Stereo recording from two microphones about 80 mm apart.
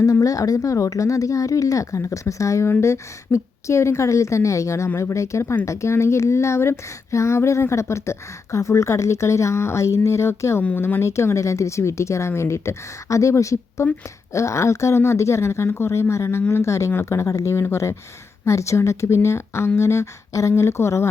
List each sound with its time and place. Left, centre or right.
0.0 s speech: left